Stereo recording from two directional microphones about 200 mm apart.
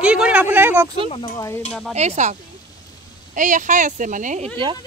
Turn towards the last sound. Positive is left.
turn(degrees=-40)  # may be behind; listen again after turning